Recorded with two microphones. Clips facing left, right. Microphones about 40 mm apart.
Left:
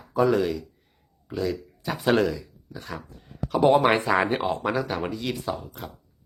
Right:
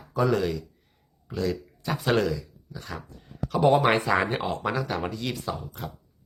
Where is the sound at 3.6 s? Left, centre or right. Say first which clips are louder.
Left 2 dB; left.